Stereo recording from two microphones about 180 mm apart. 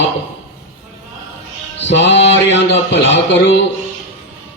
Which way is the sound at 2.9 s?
75° left (ahead or behind).